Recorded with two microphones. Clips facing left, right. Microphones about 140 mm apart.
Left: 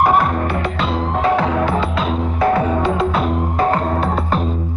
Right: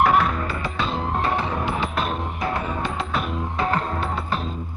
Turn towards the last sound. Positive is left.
turn(degrees=90)